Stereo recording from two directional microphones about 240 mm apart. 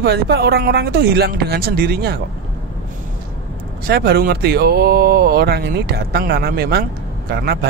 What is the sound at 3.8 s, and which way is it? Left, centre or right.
Speech, right.